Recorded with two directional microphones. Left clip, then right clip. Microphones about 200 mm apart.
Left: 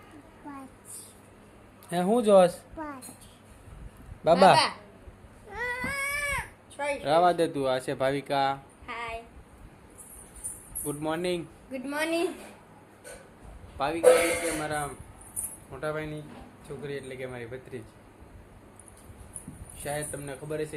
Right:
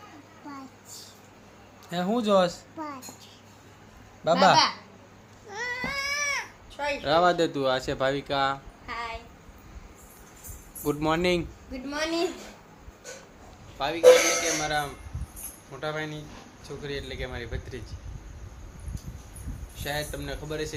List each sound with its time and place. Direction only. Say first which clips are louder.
1.9 s speech: left 3 dB; 15° left (ahead or behind)
4.2 s speech: left 1 dB; 15° left (ahead or behind)
5.5 s a sound: even; 15° left (ahead or behind)
6.2 s speech: right 2 dB; 5° right (ahead or behind)
10.8 s speech: right 5 dB; 30° right (ahead or behind)
11.7 s a woman's voice: left 1 dB; 15° left (ahead or behind)
13.7 s speech: even; 25° left (ahead or behind)
14.6 s a woman's voice: right 3 dB; 5° left (ahead or behind)
19.8 s speech: right 2 dB; 5° left (ahead or behind)